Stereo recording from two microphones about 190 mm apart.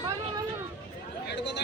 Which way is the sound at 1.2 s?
65° left (ahead or behind).